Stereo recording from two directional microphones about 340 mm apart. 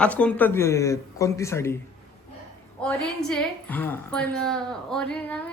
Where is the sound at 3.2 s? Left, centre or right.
Centre.